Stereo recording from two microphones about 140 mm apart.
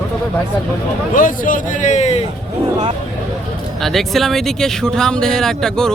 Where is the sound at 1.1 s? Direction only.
75° left (ahead or behind); by 2.2 s 55° left (ahead or behind).